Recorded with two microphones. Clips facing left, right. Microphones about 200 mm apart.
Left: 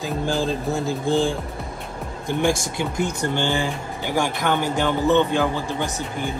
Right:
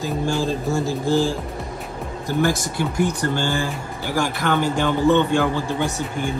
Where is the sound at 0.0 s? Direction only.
Centre (ahead or behind).